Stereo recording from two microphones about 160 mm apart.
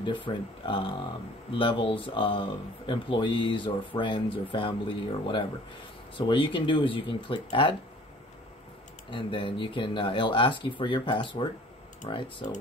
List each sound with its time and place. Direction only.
0.0 s speech: 30° left (ahead or behind)
9.1 s speech: 30° left (ahead or behind)
12.4 s speech: 45° left (ahead or behind)